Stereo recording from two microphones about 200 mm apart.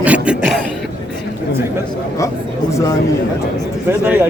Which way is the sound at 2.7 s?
15° left (ahead or behind).